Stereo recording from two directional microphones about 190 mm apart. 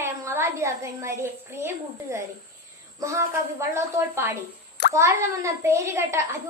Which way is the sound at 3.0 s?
15° right (ahead or behind).